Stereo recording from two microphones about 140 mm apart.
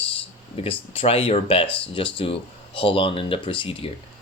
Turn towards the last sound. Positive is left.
turn(degrees=40)  # may be behind; listen again after turning